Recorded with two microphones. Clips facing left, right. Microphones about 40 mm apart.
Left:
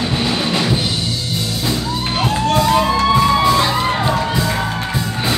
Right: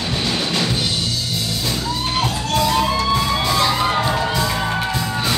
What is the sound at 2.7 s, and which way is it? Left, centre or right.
Music, centre.